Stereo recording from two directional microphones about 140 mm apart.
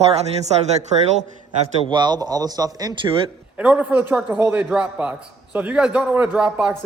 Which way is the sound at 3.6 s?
10° right (ahead or behind).